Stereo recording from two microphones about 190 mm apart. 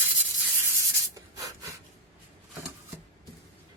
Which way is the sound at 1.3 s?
15° right (ahead or behind).